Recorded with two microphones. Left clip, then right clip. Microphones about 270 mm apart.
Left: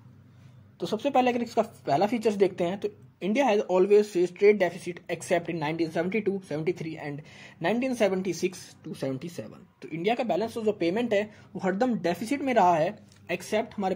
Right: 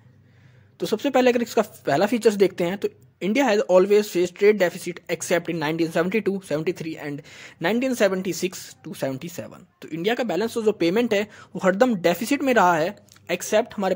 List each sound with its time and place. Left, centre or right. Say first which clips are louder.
0.7 s speech: right 4 dB; right